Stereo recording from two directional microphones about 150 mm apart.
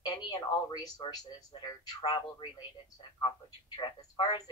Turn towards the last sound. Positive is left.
turn(degrees=25)  # may be behind; listen again after turning